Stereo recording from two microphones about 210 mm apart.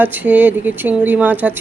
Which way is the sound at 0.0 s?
10° right (ahead or behind).